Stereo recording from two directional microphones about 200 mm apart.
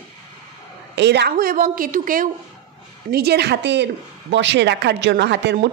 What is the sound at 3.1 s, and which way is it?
A woman's voice, 55° right (ahead or behind).